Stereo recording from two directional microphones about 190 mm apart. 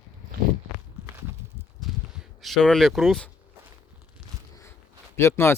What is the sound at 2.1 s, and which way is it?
Speech, centre (ahead or behind).